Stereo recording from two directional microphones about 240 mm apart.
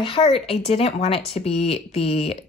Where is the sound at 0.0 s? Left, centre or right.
Left.